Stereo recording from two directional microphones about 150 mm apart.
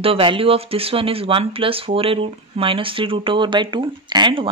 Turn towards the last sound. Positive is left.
turn(degrees=-30)  # may be behind; listen again after turning